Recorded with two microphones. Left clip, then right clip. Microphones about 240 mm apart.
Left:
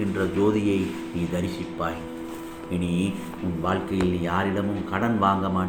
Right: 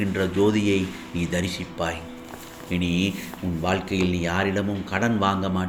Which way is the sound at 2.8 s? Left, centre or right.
Right.